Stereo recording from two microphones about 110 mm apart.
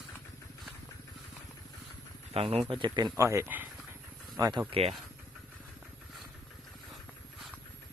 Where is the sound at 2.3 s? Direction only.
60° right (ahead or behind); by 3.1 s 40° right (ahead or behind).